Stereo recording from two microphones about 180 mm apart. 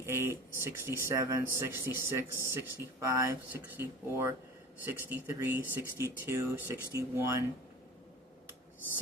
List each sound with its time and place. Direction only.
0.0 s speech: 15° right (ahead or behind)